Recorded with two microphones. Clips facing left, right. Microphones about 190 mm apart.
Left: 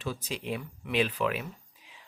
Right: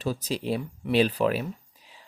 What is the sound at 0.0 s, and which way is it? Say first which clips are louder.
Speech: right 6 dB; 40° right (ahead or behind).